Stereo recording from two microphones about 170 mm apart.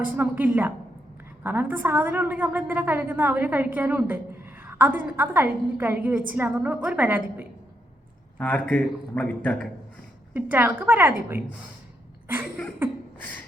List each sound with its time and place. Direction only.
0.0 s a woman's voice: 10° right (ahead or behind)
8.4 s a man's voice: 10° left (ahead or behind)
10.3 s a woman's voice: 10° right (ahead or behind)